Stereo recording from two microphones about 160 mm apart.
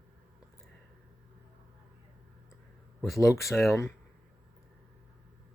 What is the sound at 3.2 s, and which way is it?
Speech, 20° left (ahead or behind).